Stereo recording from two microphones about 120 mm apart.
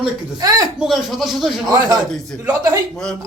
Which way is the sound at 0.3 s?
35° right (ahead or behind).